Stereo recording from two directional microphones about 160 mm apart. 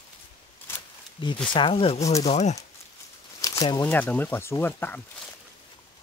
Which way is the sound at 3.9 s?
10° left (ahead or behind).